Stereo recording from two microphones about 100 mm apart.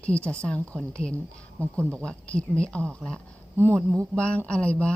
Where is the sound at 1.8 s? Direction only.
20° right (ahead or behind).